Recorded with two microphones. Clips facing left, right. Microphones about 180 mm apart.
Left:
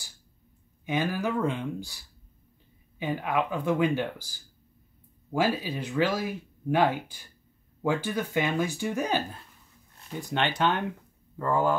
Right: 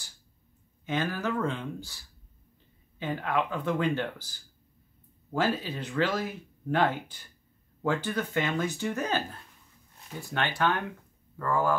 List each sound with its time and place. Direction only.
0.8 s speech: 10° left (ahead or behind)
3.0 s speech: 10° left (ahead or behind)
5.3 s speech: 10° left (ahead or behind)
10.3 s speech: 20° left (ahead or behind)